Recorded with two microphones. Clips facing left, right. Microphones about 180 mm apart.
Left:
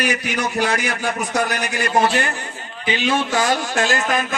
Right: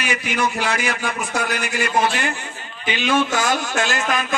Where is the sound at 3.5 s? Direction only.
45° left (ahead or behind).